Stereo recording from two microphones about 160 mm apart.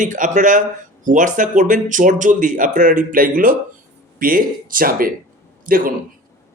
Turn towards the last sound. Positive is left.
turn(degrees=-65)  # may be behind; listen again after turning